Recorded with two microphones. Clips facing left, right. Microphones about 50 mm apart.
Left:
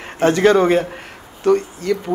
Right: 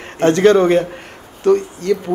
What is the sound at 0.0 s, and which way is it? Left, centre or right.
Speech, centre.